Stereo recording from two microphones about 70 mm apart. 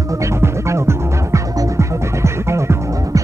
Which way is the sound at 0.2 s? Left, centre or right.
Right.